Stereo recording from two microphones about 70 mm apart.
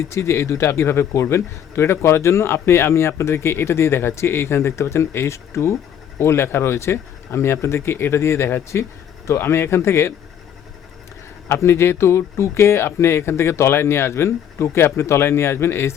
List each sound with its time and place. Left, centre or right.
0.1 s a man's voice: left
11.4 s a man's voice: left